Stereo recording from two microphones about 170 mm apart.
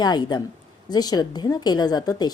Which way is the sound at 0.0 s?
25° left (ahead or behind).